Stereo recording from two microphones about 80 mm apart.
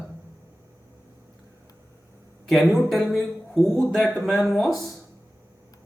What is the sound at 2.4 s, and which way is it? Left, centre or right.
A man's voice, centre.